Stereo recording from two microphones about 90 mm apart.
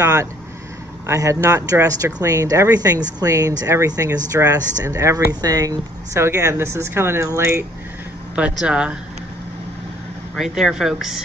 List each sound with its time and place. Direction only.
0.0 s speech: 35° right (ahead or behind)
6.2 s speech: 30° right (ahead or behind)
8.4 s speech: 10° right (ahead or behind)
10.3 s speech: 5° right (ahead or behind)